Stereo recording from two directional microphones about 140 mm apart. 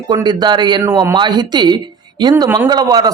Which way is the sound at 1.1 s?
30° right (ahead or behind).